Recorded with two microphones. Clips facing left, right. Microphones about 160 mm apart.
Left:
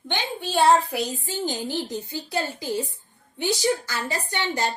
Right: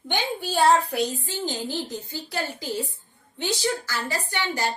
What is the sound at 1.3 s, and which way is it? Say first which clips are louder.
A woman's voice: left 2 dB; 15° left (ahead or behind).